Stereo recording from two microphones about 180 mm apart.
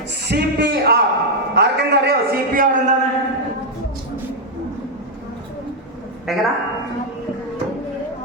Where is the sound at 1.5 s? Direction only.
65° right (ahead or behind).